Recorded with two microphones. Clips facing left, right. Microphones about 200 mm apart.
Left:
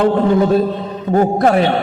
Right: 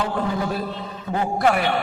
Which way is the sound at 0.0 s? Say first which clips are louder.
Left 11 dB; 60° left (ahead or behind).